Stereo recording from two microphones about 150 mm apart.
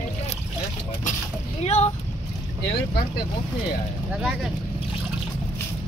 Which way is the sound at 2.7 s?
90° left.